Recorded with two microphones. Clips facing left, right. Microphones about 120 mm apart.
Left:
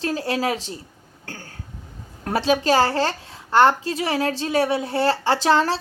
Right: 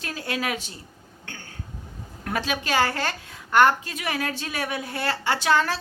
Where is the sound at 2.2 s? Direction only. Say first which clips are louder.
Left 8 dB; 30° left (ahead or behind).